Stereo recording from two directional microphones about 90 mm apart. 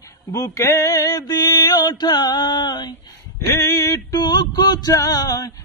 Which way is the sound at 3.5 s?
30° left (ahead or behind).